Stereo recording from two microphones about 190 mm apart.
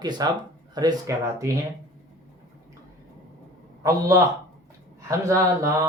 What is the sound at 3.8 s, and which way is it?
Speech, 15° right (ahead or behind).